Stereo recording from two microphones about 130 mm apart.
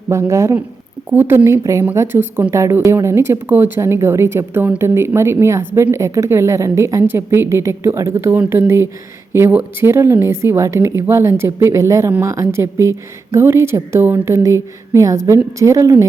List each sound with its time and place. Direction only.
0.1 s a woman's voice: 20° right (ahead or behind)